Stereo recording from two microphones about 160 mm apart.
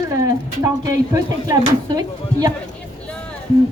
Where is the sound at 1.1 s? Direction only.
20° right (ahead or behind).